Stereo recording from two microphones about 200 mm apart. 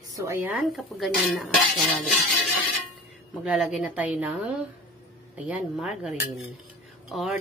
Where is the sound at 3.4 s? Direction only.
5° right (ahead or behind).